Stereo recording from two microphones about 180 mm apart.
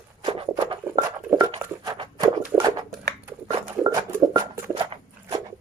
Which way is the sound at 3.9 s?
20° right (ahead or behind).